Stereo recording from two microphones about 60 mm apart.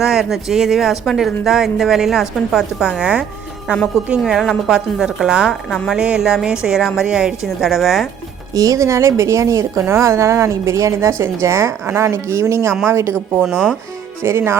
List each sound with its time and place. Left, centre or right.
0.0 s a woman's voice: centre
8.5 s a woman's voice: right